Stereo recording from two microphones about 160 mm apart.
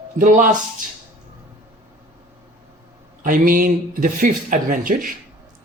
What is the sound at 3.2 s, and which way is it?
Speech, 60° right (ahead or behind).